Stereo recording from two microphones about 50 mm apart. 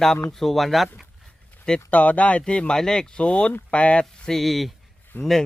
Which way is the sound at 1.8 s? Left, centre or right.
Left.